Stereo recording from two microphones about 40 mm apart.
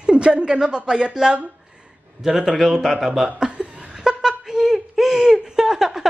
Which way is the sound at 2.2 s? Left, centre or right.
Centre.